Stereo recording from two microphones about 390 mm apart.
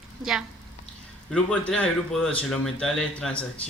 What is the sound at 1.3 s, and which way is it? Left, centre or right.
A woman's voice, centre.